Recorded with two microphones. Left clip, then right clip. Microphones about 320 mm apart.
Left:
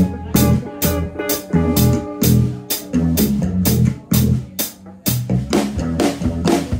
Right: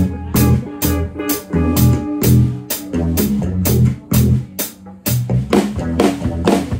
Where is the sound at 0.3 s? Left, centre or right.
Right.